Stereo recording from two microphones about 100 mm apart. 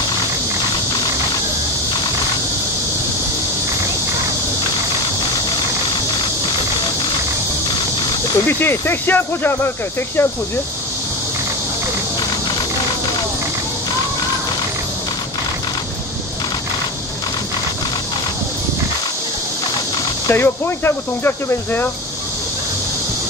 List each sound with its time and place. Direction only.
8.5 s speech: 25° left (ahead or behind)
20.2 s speech: 25° left (ahead or behind)